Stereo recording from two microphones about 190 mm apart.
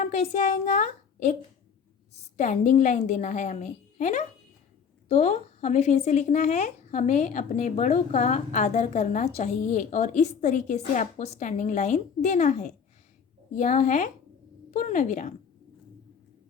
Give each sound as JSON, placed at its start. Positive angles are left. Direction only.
{"t": 0.0, "sound": "a woman's voice", "side_deg": 35}
{"t": 2.4, "sound": "speech", "side_deg": 40}